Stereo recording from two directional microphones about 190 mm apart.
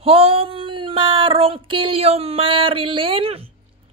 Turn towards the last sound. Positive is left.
turn(degrees=-30)  # may be behind; listen again after turning